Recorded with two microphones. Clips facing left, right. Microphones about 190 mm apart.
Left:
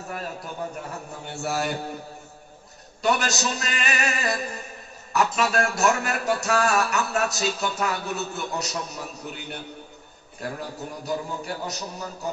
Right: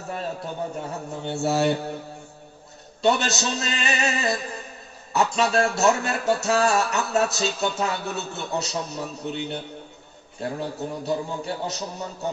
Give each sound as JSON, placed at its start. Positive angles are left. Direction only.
{"t": 0.7, "sound": "music", "side_deg": -25}
{"t": 3.0, "sound": "music", "side_deg": -25}